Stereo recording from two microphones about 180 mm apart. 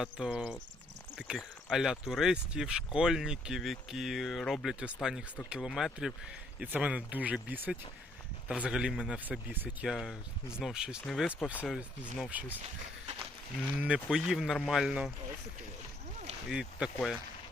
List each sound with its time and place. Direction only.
0.0 s speech: 5° right (ahead or behind)
13.7 s speech: 5° right (ahead or behind)
16.5 s speech: 5° right (ahead or behind)